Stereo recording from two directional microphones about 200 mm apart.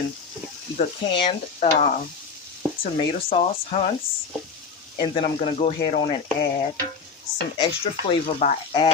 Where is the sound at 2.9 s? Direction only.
25° left (ahead or behind).